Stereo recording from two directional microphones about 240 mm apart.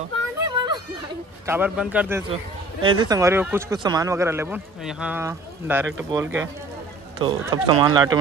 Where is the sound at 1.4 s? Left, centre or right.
Centre.